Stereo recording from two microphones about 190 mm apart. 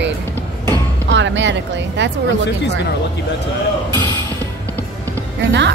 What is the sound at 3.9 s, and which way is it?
Music, 25° right (ahead or behind).